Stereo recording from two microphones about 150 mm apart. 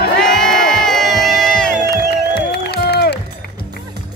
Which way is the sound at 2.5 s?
90° left.